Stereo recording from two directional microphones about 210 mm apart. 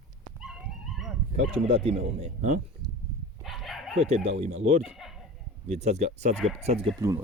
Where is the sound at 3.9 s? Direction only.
30° right (ahead or behind).